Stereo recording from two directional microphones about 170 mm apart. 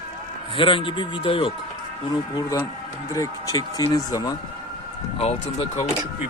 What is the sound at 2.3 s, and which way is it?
Speech, 20° left (ahead or behind).